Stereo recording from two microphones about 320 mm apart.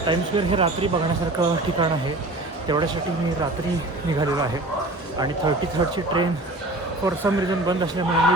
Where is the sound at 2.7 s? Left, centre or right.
Centre.